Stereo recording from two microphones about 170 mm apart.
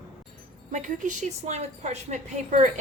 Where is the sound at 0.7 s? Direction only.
50° right (ahead or behind).